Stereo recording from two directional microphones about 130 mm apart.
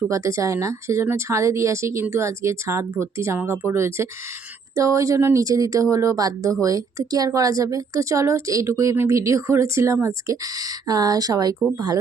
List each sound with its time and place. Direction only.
0.1 s speech: 25° right (ahead or behind)